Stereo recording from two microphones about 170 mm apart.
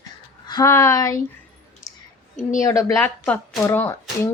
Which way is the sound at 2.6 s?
15° left (ahead or behind).